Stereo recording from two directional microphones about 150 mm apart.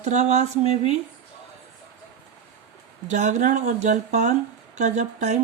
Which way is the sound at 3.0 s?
55° right (ahead or behind).